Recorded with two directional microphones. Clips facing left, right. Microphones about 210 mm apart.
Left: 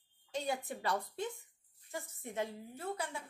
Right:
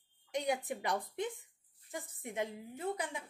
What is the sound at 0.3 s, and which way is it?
A woman's voice, 15° right (ahead or behind).